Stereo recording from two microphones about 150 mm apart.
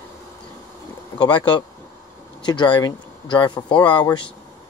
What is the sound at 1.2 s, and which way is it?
Speech, 30° left (ahead or behind).